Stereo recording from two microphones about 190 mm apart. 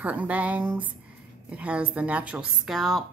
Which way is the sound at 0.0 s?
5° right (ahead or behind).